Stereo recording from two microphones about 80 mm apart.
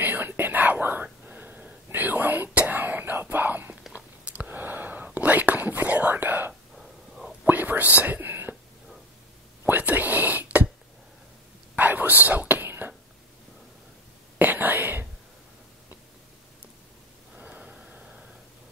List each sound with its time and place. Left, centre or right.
0.0 s whispering: right
6.8 s whispering: centre
7.4 s whispering: right
9.7 s whispering: right
11.7 s whispering: right
14.4 s whispering: right
17.4 s a sound: centre